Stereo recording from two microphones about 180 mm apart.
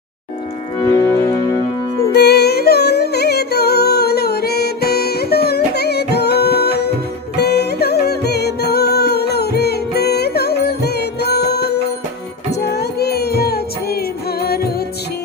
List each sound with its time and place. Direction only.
0.8 s music: 15° left (ahead or behind)
2.1 s music: 65° left (ahead or behind)